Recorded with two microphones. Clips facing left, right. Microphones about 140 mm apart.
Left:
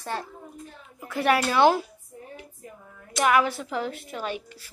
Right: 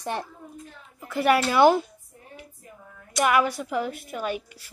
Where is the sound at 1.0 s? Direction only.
Centre (ahead or behind).